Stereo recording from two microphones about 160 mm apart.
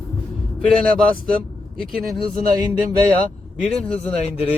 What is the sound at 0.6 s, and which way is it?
Speech, 5° left (ahead or behind).